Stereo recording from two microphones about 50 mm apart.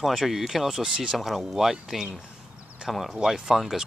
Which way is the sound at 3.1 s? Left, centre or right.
Centre.